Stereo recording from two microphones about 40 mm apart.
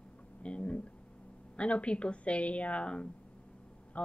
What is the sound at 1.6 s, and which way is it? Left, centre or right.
A woman's voice, left.